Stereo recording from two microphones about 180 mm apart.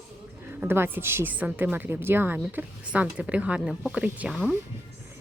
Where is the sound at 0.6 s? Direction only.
10° right (ahead or behind).